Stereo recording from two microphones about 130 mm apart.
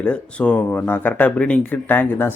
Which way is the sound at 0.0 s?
10° left (ahead or behind).